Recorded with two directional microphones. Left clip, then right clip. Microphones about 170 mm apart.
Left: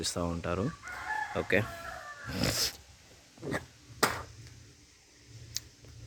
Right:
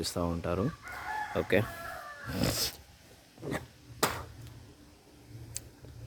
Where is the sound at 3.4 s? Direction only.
30° left (ahead or behind).